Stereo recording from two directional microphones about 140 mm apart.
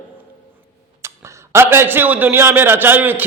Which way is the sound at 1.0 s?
20° right (ahead or behind).